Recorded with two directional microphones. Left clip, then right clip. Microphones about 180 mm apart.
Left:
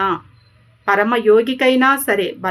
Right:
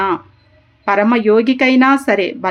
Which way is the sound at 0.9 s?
35° right (ahead or behind).